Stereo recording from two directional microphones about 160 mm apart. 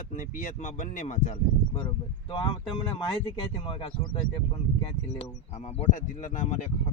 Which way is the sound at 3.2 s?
30° left (ahead or behind).